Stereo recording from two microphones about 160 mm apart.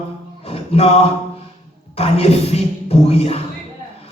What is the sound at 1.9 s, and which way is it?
A man's voice, 40° left (ahead or behind).